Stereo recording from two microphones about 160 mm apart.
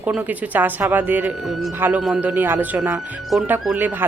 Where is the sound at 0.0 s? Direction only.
10° right (ahead or behind).